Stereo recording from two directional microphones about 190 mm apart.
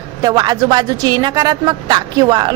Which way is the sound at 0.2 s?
20° right (ahead or behind).